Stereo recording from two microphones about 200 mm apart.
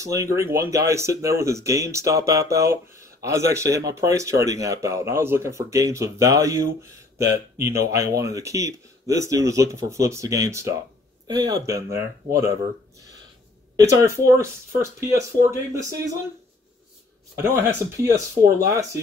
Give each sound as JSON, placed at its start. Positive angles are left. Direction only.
{"t": 0.0, "sound": "speech", "side_deg": -15}
{"t": 13.7, "sound": "speech", "side_deg": -15}
{"t": 17.4, "sound": "speech", "side_deg": -15}